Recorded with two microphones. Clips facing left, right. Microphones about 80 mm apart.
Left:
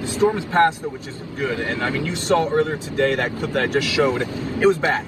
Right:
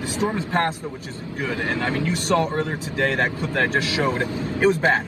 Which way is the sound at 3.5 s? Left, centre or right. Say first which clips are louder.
Left 2 dB; right.